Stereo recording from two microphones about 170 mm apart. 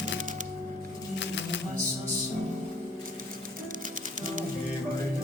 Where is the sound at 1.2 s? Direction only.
90° left.